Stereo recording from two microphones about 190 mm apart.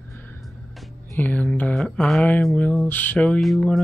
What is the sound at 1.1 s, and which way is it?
Speech, 10° left (ahead or behind).